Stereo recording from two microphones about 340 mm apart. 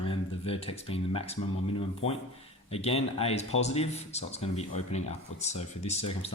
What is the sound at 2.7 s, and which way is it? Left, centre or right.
Speech, centre.